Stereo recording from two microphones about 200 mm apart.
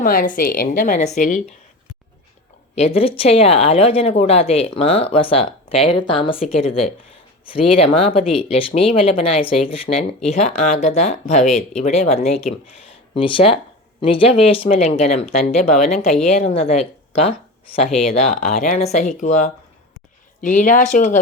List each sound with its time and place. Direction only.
0.0 s a woman's voice: 45° left (ahead or behind)
2.7 s speech: 30° left (ahead or behind)